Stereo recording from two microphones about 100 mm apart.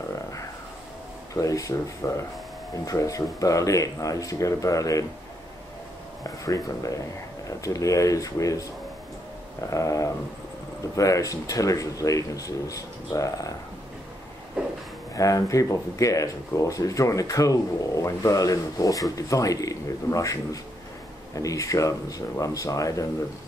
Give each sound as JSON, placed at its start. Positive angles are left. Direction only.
{"t": 1.3, "sound": "speech", "side_deg": 35}
{"t": 6.2, "sound": "speech", "side_deg": 35}
{"t": 15.1, "sound": "speech", "side_deg": 35}
{"t": 21.4, "sound": "speech", "side_deg": 35}